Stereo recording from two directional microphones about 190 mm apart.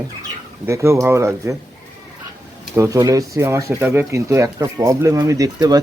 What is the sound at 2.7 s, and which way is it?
Speech, 15° right (ahead or behind).